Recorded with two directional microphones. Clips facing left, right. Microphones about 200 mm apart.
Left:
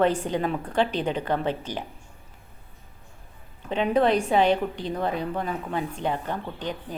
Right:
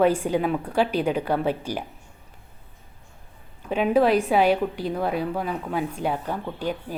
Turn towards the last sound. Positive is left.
turn(degrees=-10)  # may be behind; listen again after turning